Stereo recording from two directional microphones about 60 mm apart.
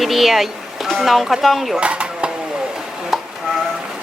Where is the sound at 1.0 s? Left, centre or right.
Centre.